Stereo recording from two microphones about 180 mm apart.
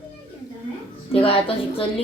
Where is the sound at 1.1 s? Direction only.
30° left (ahead or behind).